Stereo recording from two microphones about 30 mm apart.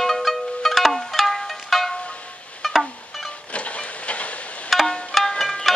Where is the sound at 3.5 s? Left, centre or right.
Left.